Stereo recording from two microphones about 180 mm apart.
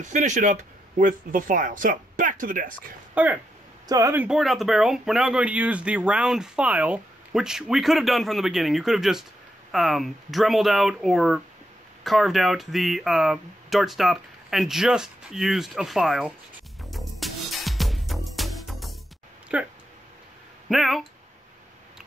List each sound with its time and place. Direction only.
0.0 s speech: 45° right (ahead or behind)
3.2 s speech: 10° right (ahead or behind)
16.9 s music: centre (ahead or behind)
19.5 s speech: 5° right (ahead or behind)